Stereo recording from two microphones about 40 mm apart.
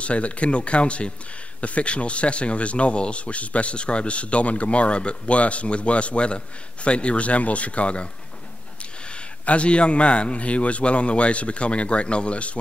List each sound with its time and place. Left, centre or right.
0.0 s speech: left
9.5 s speech: left